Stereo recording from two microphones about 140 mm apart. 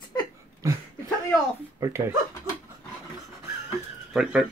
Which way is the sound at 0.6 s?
25° right (ahead or behind).